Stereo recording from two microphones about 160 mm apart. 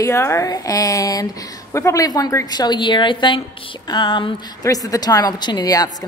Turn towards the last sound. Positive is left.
turn(degrees=25)  # may be behind; listen again after turning